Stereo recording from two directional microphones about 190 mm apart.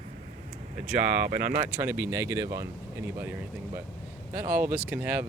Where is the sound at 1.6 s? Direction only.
15° right (ahead or behind).